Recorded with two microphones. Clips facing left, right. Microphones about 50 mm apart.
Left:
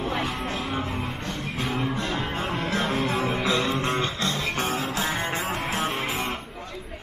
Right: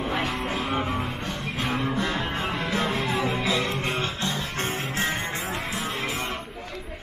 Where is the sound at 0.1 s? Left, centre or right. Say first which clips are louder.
Right 1 dB; centre.